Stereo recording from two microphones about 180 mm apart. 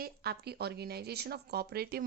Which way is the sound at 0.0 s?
60° right (ahead or behind).